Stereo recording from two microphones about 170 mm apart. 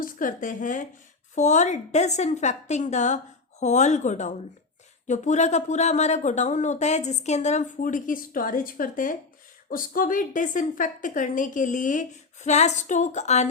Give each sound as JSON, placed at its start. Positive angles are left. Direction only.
{"t": 0.0, "sound": "speech", "side_deg": 50}